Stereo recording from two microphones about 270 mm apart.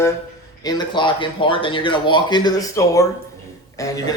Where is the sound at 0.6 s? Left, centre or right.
Centre.